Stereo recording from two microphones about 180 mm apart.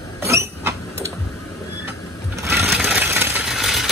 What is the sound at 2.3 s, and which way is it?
Sewing machine, 15° right (ahead or behind).